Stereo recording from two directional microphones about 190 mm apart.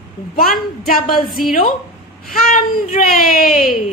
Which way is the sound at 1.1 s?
Centre (ahead or behind).